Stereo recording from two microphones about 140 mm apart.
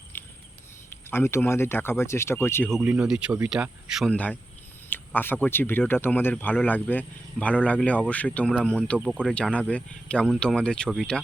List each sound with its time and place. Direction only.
0.9 s speech: 20° left (ahead or behind)
2.6 s speech: centre (ahead or behind)
4.1 s speech: 10° left (ahead or behind)